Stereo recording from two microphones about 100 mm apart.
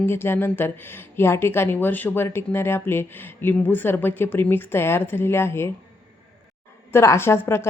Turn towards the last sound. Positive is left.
turn(degrees=25)  # may be behind; listen again after turning